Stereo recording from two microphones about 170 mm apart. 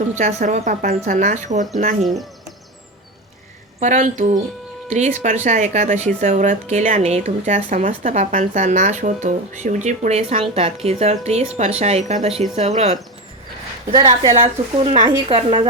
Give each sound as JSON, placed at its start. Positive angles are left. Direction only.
{"t": 0.2, "sound": "a woman's voice", "side_deg": -45}
{"t": 2.0, "sound": "speech", "side_deg": 0}
{"t": 3.8, "sound": "a woman's voice", "side_deg": -45}
{"t": 13.9, "sound": "a woman's voice", "side_deg": -25}
{"t": 14.3, "sound": "speech", "side_deg": -35}